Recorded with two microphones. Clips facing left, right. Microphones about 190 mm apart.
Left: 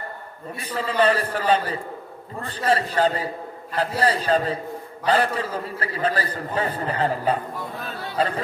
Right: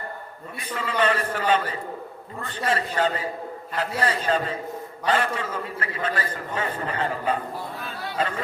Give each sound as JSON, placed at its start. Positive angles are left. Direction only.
{"t": 0.6, "sound": "a man's voice", "side_deg": 35}